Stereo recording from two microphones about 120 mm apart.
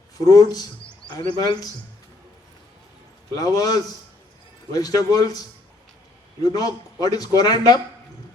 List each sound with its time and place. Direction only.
0.3 s speech: 30° left (ahead or behind)
3.3 s speech: 30° left (ahead or behind)
6.4 s speech: 30° left (ahead or behind)